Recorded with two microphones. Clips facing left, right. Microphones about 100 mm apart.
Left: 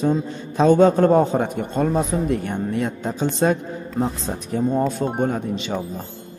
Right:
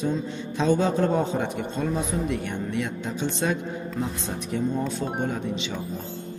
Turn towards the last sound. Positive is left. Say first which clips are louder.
# left 5 dB
turn(degrees=45)  # may be behind; listen again after turning